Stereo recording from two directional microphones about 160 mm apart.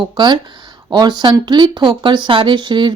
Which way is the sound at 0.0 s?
25° right (ahead or behind).